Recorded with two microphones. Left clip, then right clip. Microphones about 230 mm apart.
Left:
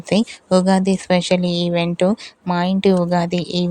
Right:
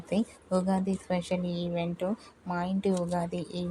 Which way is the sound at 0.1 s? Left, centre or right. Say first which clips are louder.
Left 13 dB; left.